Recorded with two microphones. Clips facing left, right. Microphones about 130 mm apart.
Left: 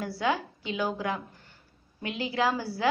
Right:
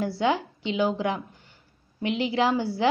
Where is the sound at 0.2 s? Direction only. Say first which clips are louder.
Right 2 dB; 25° right (ahead or behind).